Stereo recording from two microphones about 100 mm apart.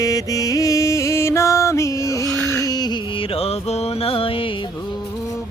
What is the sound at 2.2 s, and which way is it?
Carnatic music, 10° left (ahead or behind).